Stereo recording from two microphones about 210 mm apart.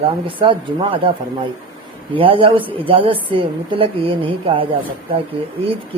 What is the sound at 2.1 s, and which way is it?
Speech, 25° right (ahead or behind).